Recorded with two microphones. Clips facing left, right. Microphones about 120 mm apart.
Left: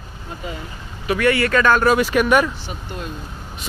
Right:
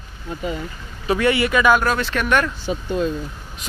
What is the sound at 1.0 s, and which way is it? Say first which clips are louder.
Speech: even; 25° right (ahead or behind).